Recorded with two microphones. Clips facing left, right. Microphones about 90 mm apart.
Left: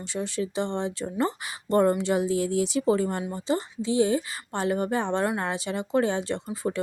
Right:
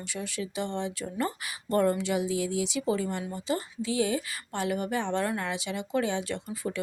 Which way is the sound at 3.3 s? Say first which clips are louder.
Left 4 dB; 30° left (ahead or behind).